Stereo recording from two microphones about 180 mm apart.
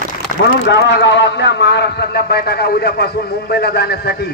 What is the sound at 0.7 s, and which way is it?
A man's voice, 75° left (ahead or behind).